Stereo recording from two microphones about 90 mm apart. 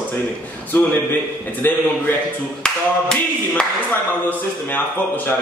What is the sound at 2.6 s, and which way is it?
Speech, 10° left (ahead or behind).